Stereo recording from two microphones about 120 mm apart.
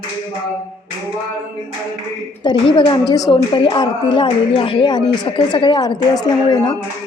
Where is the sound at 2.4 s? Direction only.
45° left (ahead or behind).